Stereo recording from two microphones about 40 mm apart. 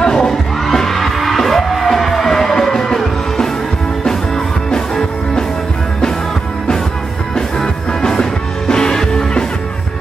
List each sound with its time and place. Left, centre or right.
0.0 s music: centre
4.6 s music: centre
7.3 s music: centre